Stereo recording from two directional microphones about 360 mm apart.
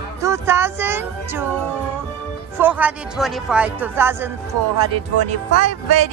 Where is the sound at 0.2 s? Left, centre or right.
Centre.